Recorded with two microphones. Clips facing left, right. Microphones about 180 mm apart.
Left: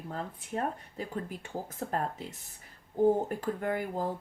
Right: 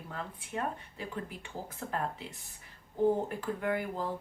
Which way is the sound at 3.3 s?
45° left (ahead or behind).